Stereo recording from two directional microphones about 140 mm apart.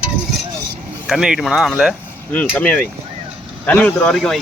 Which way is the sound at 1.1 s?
5° right (ahead or behind).